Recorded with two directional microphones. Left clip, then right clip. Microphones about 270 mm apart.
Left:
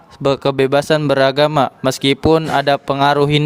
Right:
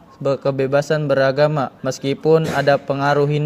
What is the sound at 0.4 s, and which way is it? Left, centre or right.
Speech, left.